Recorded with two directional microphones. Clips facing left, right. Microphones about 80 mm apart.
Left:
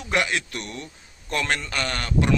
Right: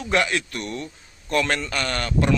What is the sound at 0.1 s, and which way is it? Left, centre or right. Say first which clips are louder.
Speech: right 2 dB; centre.